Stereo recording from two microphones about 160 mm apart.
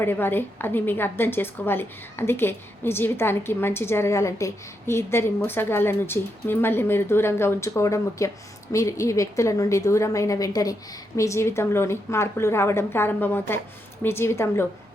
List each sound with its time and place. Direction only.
0.0 s a woman's voice: 15° left (ahead or behind)